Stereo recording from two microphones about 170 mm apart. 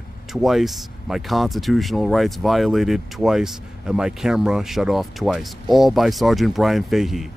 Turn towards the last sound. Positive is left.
turn(degrees=0)  # may be behind; listen again after turning